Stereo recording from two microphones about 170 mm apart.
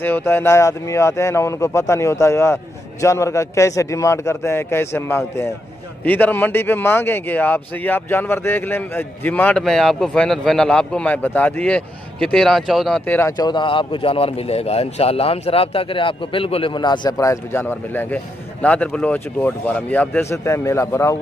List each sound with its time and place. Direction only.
0.0 s a man's voice: 15° left (ahead or behind)
13.4 s a man's voice: 25° left (ahead or behind)